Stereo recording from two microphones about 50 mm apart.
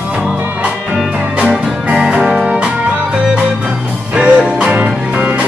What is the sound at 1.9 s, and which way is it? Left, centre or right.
Music, centre.